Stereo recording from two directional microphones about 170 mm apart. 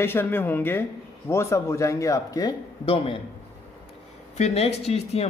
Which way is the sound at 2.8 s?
35° left (ahead or behind).